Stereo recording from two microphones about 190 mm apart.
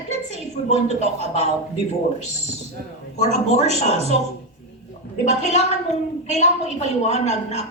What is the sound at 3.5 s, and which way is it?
Speech, 35° left (ahead or behind).